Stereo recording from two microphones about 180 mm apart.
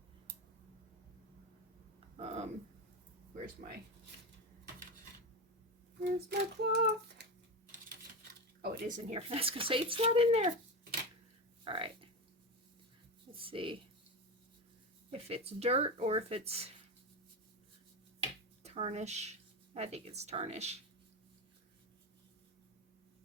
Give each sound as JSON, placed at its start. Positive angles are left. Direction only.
{"t": 2.1, "sound": "a sound", "side_deg": -35}
{"t": 3.3, "sound": "speech", "side_deg": -45}
{"t": 6.1, "sound": "female singing", "side_deg": -65}
{"t": 8.6, "sound": "speech", "side_deg": -40}
{"t": 11.6, "sound": "speech", "side_deg": -30}
{"t": 13.3, "sound": "speech", "side_deg": -30}
{"t": 15.1, "sound": "speech", "side_deg": -35}
{"t": 18.2, "sound": "a sound", "side_deg": -35}